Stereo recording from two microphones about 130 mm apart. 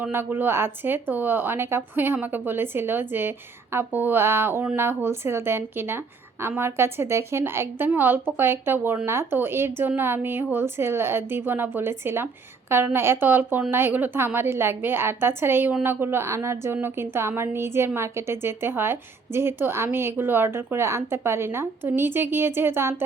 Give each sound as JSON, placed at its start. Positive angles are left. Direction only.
{"t": 0.0, "sound": "a woman's voice", "side_deg": -15}